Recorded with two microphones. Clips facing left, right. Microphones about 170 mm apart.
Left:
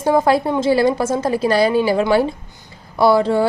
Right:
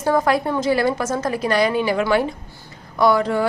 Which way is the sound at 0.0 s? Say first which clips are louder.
Left 3 dB; 25° left (ahead or behind).